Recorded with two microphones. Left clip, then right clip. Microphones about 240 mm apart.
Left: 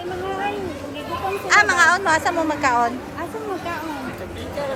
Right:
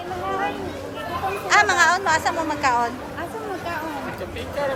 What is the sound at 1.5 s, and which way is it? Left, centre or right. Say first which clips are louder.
A woman's voice: left 2 dB; centre.